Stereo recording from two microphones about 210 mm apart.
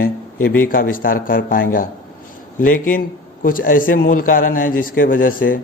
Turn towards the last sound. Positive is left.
turn(degrees=40)  # may be behind; listen again after turning